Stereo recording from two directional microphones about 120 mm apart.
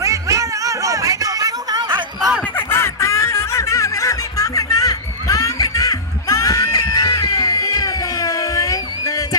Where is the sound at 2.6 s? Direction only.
20° left (ahead or behind).